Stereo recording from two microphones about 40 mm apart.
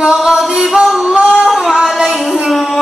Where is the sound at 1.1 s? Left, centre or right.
Right.